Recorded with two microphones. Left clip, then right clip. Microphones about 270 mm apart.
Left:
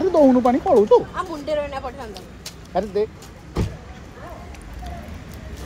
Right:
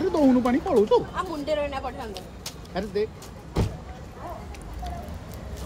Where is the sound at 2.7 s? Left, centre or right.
Centre.